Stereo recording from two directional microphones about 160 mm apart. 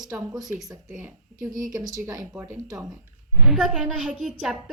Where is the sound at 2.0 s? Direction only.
15° right (ahead or behind).